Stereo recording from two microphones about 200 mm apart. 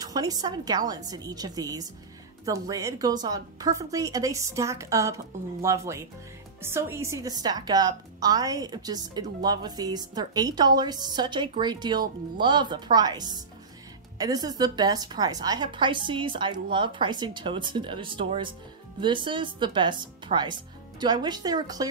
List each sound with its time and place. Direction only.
0.0 s a woman's voice: 20° right (ahead or behind)